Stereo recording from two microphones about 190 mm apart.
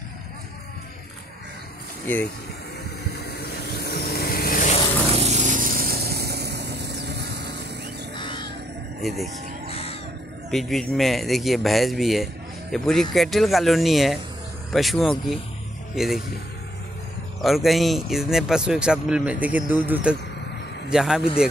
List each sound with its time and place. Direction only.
2.1 s speech: 10° left (ahead or behind)
3.1 s vehicle: 55° left (ahead or behind)
5.1 s vehicle: 35° right (ahead or behind); by 7.6 s 60° right (ahead or behind)
8.2 s music: 25° left (ahead or behind)
9.0 s speech: centre (ahead or behind)
9.7 s music: 30° left (ahead or behind)
10.5 s a man's voice: centre (ahead or behind)
17.4 s a man's voice: centre (ahead or behind)